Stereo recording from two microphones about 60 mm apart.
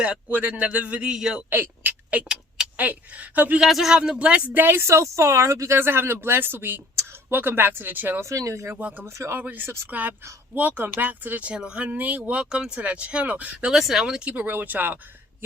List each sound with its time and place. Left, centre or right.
0.0 s speech: right
1.5 s speech: right
3.6 s a man's voice: centre; by 4.6 s right
4.6 s speech: right
4.9 s speech: right
5.8 s speech: right
8.2 s speech: right
8.7 s speech: right
9.1 s speech: right
9.4 s speech: right
11.5 s a man's voice: centre
13.7 s a man's voice: centre
14.4 s speech: right